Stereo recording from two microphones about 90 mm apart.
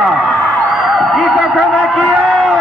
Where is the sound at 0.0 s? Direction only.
5° left (ahead or behind).